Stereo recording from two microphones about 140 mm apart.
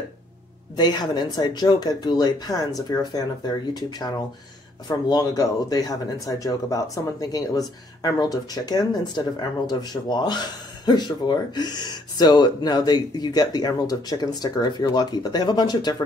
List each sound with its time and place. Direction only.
0.7 s speech: 30° left (ahead or behind)